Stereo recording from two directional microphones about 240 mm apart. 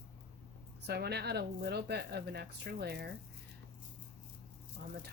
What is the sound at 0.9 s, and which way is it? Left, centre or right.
Speech, right.